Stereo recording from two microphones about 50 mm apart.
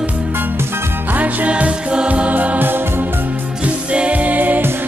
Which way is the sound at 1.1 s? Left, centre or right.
Right.